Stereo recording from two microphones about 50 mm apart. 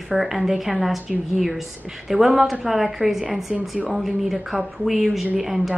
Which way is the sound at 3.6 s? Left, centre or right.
Right.